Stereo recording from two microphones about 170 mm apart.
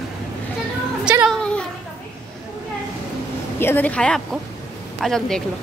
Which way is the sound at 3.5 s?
10° left (ahead or behind).